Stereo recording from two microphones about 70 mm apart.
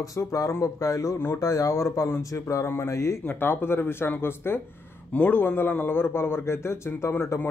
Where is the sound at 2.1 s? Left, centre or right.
Left.